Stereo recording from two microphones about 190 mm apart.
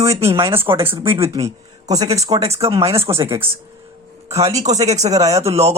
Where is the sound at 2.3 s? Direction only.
30° right (ahead or behind).